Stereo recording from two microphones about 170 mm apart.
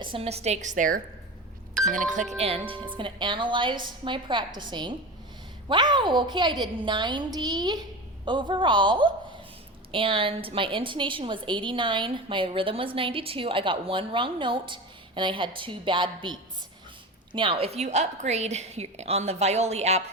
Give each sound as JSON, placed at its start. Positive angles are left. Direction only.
{"t": 0.0, "sound": "a woman's voice", "side_deg": -35}
{"t": 2.4, "sound": "a woman's voice", "side_deg": -35}